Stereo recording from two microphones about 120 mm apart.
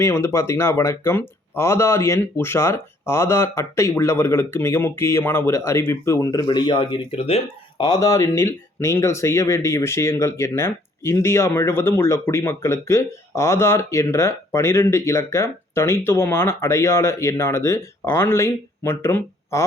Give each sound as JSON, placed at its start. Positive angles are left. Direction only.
{"t": 0.0, "sound": "speech", "side_deg": 20}
{"t": 6.5, "sound": "speech", "side_deg": 40}
{"t": 7.8, "sound": "speech", "side_deg": 30}